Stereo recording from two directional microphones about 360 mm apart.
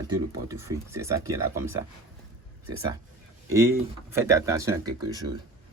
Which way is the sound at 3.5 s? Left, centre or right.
Centre.